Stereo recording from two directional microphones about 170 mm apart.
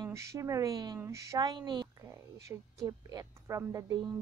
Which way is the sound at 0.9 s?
15° right (ahead or behind).